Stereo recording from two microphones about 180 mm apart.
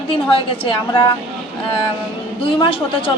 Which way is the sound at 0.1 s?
30° left (ahead or behind).